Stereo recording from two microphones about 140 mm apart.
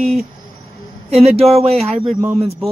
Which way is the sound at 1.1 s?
45° right (ahead or behind).